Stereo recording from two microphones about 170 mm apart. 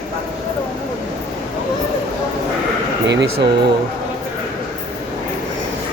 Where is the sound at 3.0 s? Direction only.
90° right.